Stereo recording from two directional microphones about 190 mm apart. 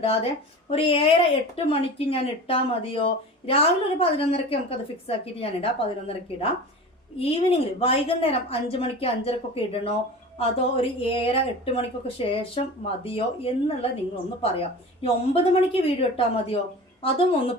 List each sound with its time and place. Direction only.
0.8 s a woman's voice: 30° left (ahead or behind)